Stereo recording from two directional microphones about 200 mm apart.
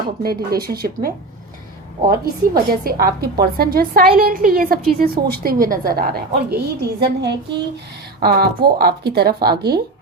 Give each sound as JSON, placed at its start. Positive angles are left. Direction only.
{"t": 0.2, "sound": "a woman's voice", "side_deg": -50}